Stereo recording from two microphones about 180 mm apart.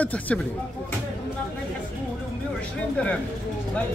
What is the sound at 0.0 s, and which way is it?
Speech, 10° left (ahead or behind).